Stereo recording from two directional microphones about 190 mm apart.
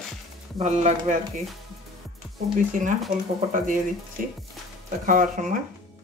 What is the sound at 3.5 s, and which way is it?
Speech, 45° right (ahead or behind).